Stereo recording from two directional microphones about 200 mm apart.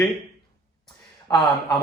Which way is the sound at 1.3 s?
15° left (ahead or behind).